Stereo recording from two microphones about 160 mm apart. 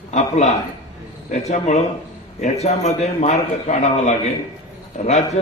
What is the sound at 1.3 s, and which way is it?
A man's voice, 45° left (ahead or behind).